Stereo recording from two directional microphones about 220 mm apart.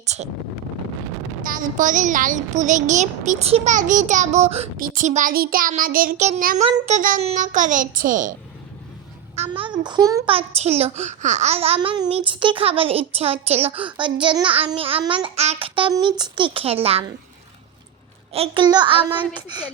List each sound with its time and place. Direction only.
0.0 s speech: 30° right (ahead or behind)
1.4 s a child's voice: 40° right (ahead or behind); by 10.3 s 15° right (ahead or behind)
10.3 s a child's voice: 30° right (ahead or behind)
18.3 s a child's voice: 25° right (ahead or behind)